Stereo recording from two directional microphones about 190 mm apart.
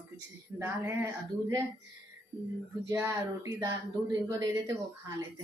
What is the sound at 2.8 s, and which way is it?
Speech, 15° right (ahead or behind).